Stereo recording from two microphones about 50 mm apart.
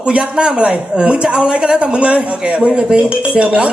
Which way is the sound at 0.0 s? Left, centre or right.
Right.